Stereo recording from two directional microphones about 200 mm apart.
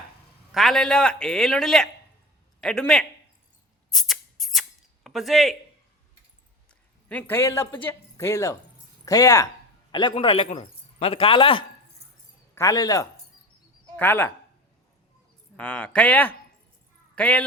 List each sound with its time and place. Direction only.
0.5 s a man's voice: centre (ahead or behind)
3.9 s music: centre (ahead or behind)
5.0 s a man's voice: centre (ahead or behind)
7.1 s speech: 10° left (ahead or behind)
15.5 s speech: 5° left (ahead or behind)